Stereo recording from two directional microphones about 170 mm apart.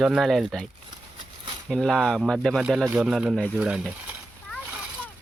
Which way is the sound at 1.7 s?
Centre (ahead or behind).